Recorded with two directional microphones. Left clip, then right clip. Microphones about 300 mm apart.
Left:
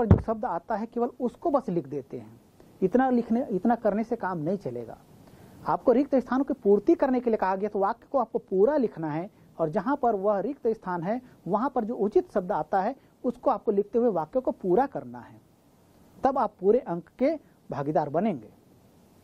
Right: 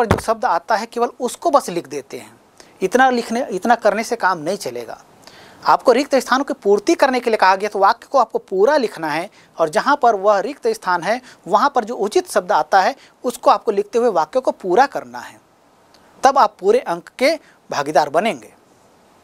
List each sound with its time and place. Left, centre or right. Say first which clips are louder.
0.0 s speech: right 10 dB; centre
5.9 s speech: right 9 dB; centre
6.4 s speech: right 7 dB; centre
6.8 s speech: right 8 dB; centre
8.3 s speech: right 7 dB; right
8.6 s speech: right 9 dB; centre
9.9 s speech: right 10 dB; centre
14.4 s speech: right 10 dB; centre
14.7 s speech: right 10 dB; centre